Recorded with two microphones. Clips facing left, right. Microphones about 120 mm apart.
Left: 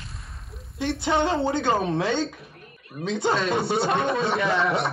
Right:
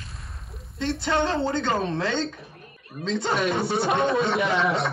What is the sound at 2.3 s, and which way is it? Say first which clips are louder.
Speech: right 1 dB; 30° right (ahead or behind).